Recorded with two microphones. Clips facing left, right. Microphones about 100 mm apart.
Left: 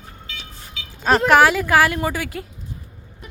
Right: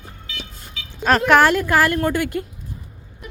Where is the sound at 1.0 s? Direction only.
5° left (ahead or behind).